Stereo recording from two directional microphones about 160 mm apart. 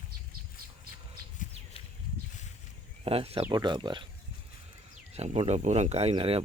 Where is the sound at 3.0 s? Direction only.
40° right (ahead or behind).